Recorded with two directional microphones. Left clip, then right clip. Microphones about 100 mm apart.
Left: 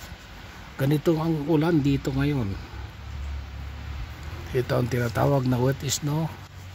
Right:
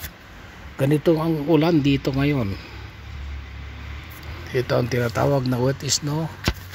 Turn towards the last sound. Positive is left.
turn(degrees=10)  # may be behind; listen again after turning